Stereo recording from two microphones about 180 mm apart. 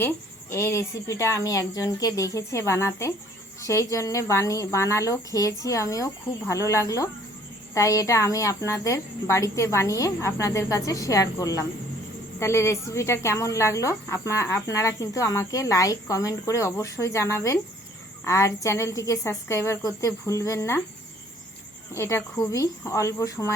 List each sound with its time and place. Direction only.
0.5 s speech: 15° left (ahead or behind)
21.9 s speech: 15° left (ahead or behind)